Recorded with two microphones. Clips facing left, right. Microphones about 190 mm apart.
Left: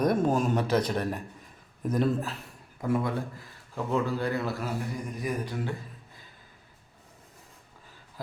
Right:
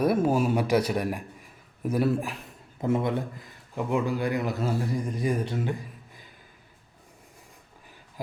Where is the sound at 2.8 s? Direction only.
20° right (ahead or behind).